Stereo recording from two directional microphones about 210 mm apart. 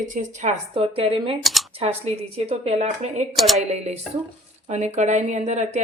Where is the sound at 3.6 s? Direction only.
30° right (ahead or behind).